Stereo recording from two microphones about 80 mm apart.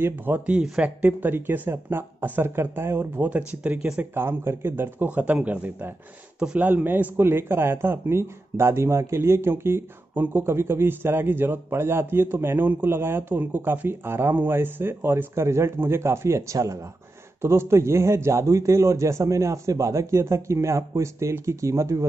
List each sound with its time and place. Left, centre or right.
0.0 s speech: right
4.1 s a man's voice: right